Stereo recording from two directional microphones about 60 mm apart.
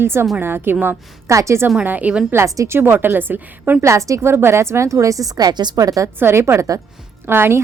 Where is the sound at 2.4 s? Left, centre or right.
Right.